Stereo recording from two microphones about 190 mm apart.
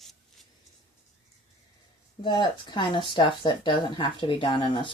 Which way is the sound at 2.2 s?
25° left (ahead or behind).